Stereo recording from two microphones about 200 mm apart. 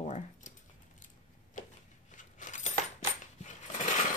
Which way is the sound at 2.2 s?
40° left (ahead or behind).